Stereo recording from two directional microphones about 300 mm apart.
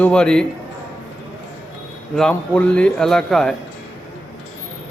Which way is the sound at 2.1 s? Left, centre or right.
Centre.